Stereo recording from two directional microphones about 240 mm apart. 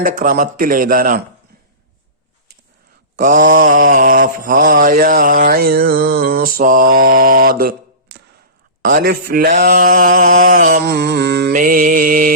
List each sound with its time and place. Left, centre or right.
0.0 s mantra: right
3.2 s mantra: right